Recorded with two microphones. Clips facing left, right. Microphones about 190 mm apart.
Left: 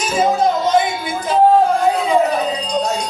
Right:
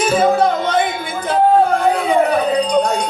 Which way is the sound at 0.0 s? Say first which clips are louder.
Right 2 dB; 55° right (ahead or behind).